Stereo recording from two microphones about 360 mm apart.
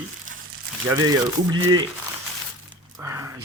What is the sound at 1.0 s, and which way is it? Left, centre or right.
Speech, right.